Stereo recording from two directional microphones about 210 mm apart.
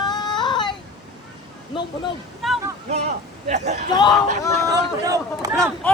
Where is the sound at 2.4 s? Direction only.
Centre (ahead or behind).